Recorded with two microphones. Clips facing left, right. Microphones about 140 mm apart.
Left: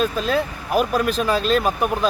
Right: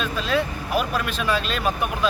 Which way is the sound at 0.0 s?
40° left (ahead or behind).